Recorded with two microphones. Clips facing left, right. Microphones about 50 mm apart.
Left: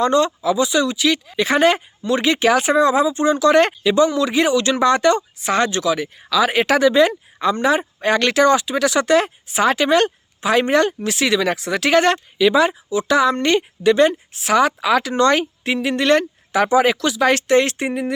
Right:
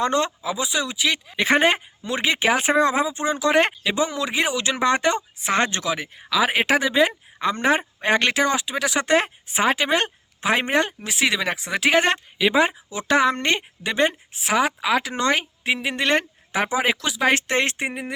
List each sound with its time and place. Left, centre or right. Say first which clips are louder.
0.0 s speech: left 5 dB; right
0.4 s speech: left 8 dB; centre
1.4 s speech: left 2 dB; right
6.3 s speech: left 3 dB; centre
7.5 s speech: left 2 dB; right
8.0 s speech: left 5 dB; right
9.0 s speech: left 4 dB; right
12.9 s speech: left 3 dB; right; by 17.3 s centre
17.3 s speech: left 6 dB; right